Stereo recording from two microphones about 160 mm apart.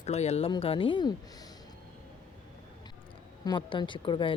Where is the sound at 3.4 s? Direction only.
30° left (ahead or behind).